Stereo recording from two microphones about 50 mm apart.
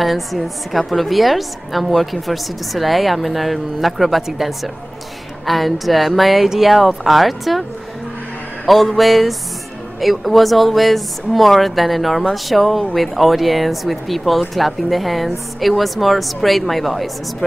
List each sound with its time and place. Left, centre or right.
0.0 s a woman's voice: centre
8.6 s a woman's voice: centre